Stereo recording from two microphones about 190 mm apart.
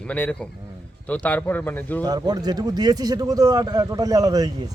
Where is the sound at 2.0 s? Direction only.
20° right (ahead or behind).